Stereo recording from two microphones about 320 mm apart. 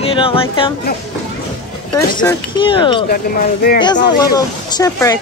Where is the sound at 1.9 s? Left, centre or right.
Centre.